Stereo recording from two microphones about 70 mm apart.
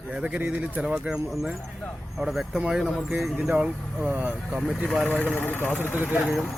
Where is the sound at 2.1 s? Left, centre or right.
Centre; by 4.6 s right.